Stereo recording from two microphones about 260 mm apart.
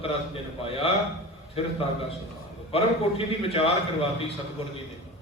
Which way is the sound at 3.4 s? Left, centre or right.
Left.